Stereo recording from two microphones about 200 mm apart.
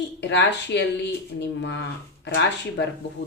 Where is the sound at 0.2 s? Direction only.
60° left (ahead or behind).